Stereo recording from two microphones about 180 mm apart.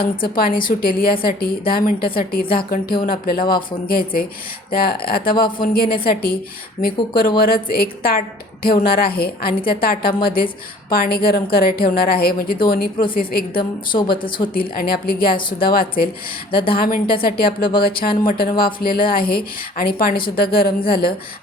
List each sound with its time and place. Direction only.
0.3 s a woman's voice: 55° left (ahead or behind)
14.2 s a woman's voice: 25° left (ahead or behind)
14.4 s a woman's voice: 55° left (ahead or behind)